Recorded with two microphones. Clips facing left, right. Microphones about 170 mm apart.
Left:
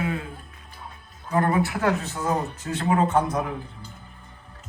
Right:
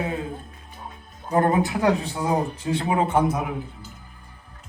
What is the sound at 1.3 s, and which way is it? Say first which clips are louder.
Speech: right 2 dB; 20° right (ahead or behind).